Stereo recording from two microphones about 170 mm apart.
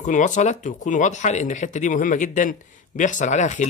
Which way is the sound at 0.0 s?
45° left (ahead or behind).